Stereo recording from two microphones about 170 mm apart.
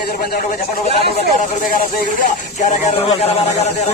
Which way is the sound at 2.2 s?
45° left (ahead or behind).